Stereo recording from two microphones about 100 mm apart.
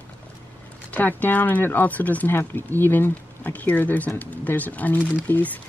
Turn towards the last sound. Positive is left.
turn(degrees=20)  # may be behind; listen again after turning